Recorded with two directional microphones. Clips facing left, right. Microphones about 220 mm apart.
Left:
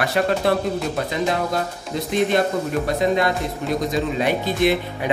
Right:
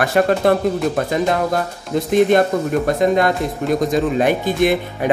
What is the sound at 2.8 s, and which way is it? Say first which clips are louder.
Speech: right 3 dB; 50° right (ahead or behind).